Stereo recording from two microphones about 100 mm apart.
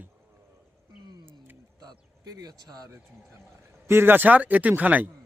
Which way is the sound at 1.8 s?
40° right (ahead or behind).